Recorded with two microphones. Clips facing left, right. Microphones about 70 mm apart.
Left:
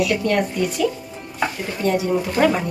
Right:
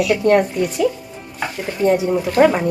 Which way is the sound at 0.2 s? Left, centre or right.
Right.